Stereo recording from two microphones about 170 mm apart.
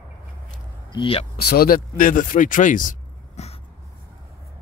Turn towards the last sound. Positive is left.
turn(degrees=45)  # may be behind; listen again after turning